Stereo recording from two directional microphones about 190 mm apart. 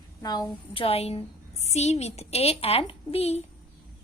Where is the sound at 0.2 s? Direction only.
20° left (ahead or behind).